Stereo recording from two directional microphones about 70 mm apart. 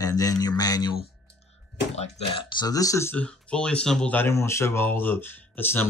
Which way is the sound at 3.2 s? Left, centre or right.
Centre.